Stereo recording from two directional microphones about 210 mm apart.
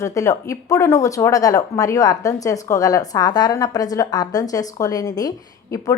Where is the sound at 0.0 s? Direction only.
15° left (ahead or behind).